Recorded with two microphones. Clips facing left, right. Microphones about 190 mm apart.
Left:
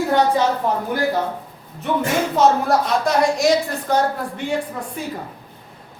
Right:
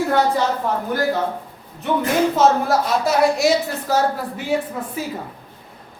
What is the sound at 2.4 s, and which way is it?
A woman's voice, 5° right (ahead or behind).